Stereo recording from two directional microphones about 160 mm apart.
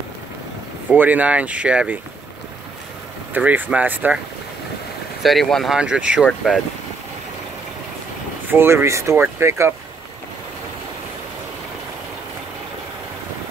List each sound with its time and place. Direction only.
0.8 s speech: 10° right (ahead or behind)
3.3 s speech: 10° right (ahead or behind)
5.2 s speech: centre (ahead or behind)
8.5 s speech: 15° right (ahead or behind)